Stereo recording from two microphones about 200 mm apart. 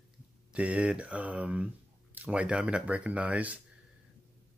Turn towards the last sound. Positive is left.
turn(degrees=-5)  # may be behind; listen again after turning